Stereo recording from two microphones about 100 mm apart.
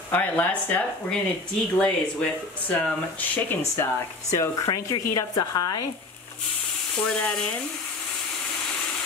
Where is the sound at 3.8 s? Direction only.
30° left (ahead or behind).